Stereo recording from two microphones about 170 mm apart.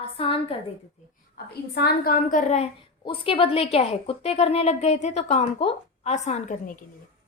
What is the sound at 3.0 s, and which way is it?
A woman's voice, 30° left (ahead or behind).